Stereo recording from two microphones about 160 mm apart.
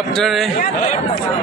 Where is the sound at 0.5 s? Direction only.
45° left (ahead or behind).